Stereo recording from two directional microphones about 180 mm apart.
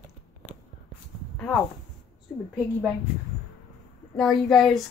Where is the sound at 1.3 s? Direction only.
10° left (ahead or behind).